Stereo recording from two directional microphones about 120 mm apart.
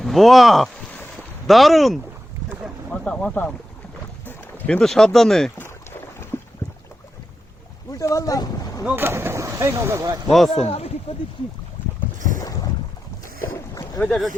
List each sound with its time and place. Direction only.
0.0 s speech: centre (ahead or behind)
6.3 s boat: 15° left (ahead or behind)
7.9 s speech: 30° left (ahead or behind)
9.0 s speech: 20° right (ahead or behind)
10.2 s speech: centre (ahead or behind)
10.7 s speech: 60° left (ahead or behind)
12.4 s boat: 25° left (ahead or behind)
14.0 s speech: 20° left (ahead or behind)